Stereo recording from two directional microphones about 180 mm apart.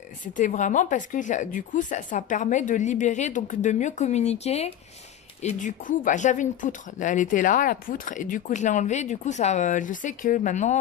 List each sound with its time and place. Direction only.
0.2 s speech: 45° left (ahead or behind)